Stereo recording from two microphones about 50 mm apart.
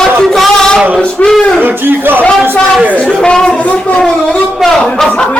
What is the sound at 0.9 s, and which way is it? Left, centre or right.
Speech, centre.